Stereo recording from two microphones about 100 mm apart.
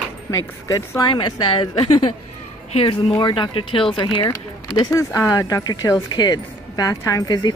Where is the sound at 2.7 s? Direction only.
70° left (ahead or behind).